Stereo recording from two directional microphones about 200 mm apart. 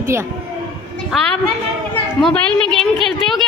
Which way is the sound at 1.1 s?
5° left (ahead or behind).